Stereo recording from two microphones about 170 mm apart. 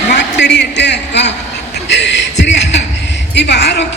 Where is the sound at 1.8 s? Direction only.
90° left.